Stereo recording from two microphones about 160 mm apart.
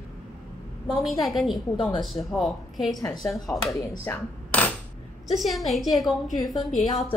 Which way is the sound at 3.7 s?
20° left (ahead or behind).